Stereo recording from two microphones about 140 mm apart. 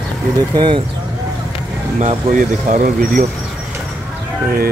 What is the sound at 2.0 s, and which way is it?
Speech, 55° right (ahead or behind).